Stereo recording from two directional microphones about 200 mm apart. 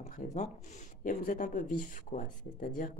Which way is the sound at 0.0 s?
35° left (ahead or behind).